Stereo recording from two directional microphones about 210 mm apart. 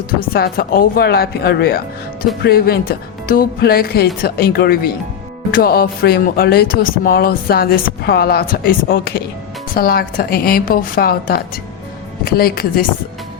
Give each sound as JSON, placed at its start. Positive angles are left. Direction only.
{"t": 0.2, "sound": "speech", "side_deg": 45}